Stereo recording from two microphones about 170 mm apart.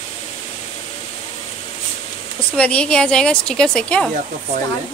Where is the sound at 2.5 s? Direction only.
5° left (ahead or behind).